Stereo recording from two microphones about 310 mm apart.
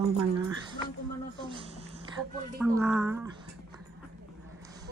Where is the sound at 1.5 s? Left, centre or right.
Centre.